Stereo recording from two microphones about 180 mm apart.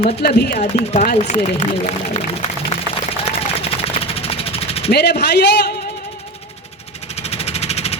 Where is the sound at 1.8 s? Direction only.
40° left (ahead or behind).